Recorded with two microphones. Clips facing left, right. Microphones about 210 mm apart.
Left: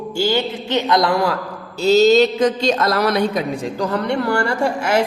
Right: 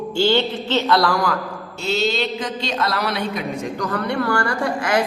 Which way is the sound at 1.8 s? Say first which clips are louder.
Left 10 dB; 40° left (ahead or behind).